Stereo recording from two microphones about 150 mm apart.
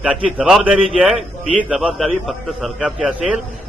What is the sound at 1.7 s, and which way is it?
A man's voice, 5° right (ahead or behind).